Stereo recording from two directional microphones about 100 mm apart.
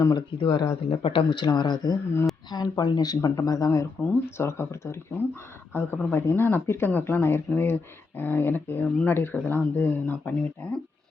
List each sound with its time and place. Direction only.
0.2 s speech: 55° left (ahead or behind); by 10.7 s 15° left (ahead or behind)